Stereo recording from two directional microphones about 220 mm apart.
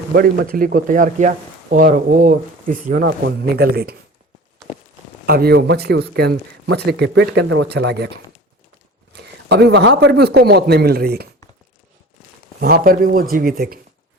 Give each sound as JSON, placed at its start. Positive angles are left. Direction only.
{"t": 0.1, "sound": "speech", "side_deg": -40}
{"t": 5.2, "sound": "speech", "side_deg": -45}
{"t": 12.5, "sound": "speech", "side_deg": -45}